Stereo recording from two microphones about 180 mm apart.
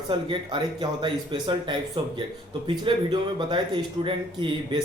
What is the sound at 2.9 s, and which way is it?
A man's voice, 30° right (ahead or behind).